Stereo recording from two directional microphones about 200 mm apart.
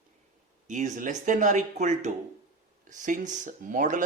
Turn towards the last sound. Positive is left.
turn(degrees=-40)  # may be behind; listen again after turning